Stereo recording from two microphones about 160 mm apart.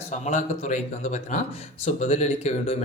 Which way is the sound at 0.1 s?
50° left (ahead or behind).